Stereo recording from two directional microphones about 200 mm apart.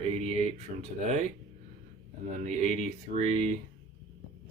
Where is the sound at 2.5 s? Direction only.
35° right (ahead or behind).